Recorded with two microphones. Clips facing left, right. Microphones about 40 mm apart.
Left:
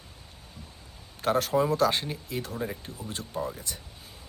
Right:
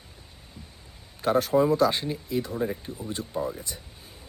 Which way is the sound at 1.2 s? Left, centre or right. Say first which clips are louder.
Right 3 dB; left.